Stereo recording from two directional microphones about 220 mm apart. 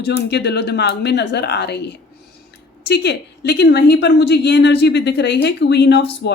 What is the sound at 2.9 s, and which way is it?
A woman's voice, 50° left (ahead or behind).